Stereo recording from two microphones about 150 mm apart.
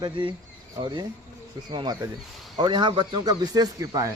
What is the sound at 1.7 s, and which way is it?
A man's voice, 35° right (ahead or behind).